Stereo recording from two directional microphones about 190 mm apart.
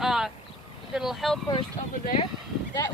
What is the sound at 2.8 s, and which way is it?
Speech, 15° left (ahead or behind).